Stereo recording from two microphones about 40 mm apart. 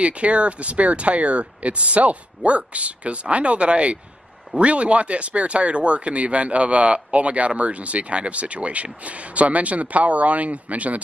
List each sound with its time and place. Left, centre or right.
0.0 s speech: right